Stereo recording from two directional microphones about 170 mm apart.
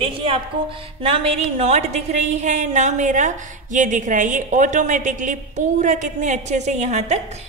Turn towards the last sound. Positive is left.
turn(degrees=-40)  # may be behind; listen again after turning